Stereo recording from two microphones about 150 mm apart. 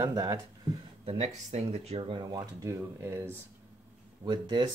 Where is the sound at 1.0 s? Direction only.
45° right (ahead or behind).